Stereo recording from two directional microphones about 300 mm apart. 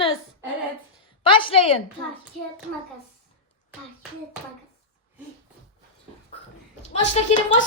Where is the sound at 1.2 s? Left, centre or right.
Centre.